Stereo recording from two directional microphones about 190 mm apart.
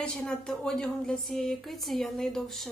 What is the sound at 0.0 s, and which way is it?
Speech, 5° left (ahead or behind).